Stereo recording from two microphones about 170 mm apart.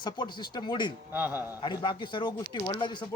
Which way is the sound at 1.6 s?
25° left (ahead or behind).